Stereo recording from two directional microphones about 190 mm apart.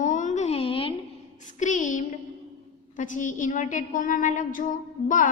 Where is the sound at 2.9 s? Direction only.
40° left (ahead or behind).